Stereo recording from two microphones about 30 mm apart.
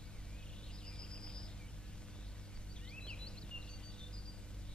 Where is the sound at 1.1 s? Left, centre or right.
Left.